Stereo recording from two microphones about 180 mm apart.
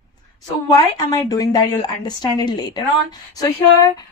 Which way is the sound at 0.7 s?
20° left (ahead or behind).